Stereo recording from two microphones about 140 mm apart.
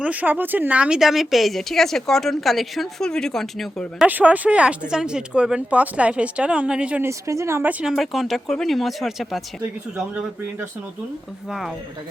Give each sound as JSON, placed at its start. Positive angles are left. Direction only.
{"t": 0.0, "sound": "speech", "side_deg": -10}
{"t": 4.0, "sound": "a woman's voice", "side_deg": -10}
{"t": 7.1, "sound": "speech", "side_deg": -20}